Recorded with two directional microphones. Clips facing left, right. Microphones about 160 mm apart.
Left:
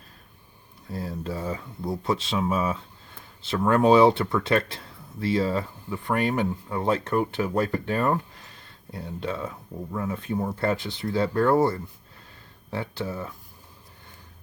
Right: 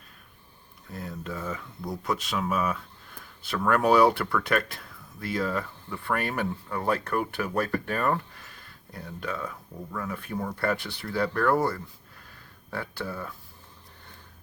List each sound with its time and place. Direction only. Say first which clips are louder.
0.9 s speech: left 4 dB; 30° left (ahead or behind)